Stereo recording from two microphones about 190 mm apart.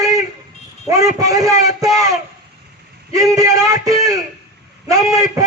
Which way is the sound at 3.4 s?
20° right (ahead or behind).